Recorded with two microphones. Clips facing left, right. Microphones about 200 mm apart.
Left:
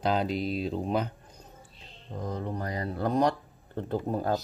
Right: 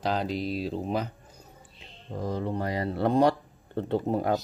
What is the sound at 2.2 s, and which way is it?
Speech, 30° right (ahead or behind).